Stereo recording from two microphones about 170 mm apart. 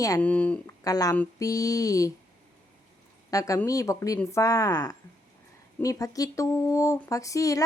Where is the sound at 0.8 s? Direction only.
20° left (ahead or behind).